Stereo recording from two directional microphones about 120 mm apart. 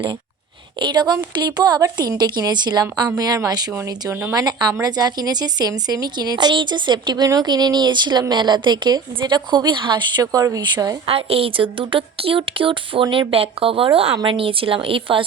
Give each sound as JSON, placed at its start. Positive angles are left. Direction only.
{"t": 0.8, "sound": "a woman's voice", "side_deg": -40}
{"t": 11.0, "sound": "speech", "side_deg": -55}